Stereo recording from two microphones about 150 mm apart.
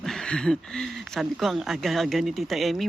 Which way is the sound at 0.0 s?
5° left (ahead or behind).